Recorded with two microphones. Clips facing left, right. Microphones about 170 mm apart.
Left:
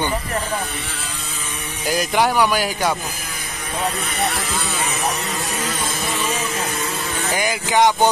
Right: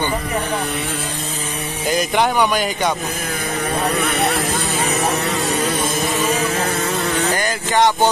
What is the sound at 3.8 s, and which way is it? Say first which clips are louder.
Vehicle: right 2 dB; 65° right (ahead or behind).